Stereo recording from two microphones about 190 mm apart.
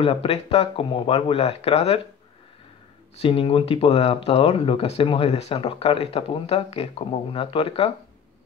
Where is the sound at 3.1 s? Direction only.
30° left (ahead or behind).